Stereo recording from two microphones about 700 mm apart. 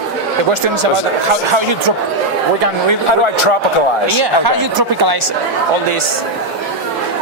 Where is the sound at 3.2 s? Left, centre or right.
Left.